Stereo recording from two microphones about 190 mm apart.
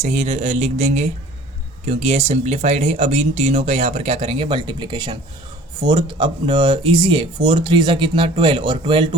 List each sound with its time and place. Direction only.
0.0 s speech: 35° right (ahead or behind)